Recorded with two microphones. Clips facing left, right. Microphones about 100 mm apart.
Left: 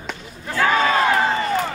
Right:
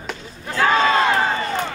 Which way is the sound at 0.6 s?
25° right (ahead or behind).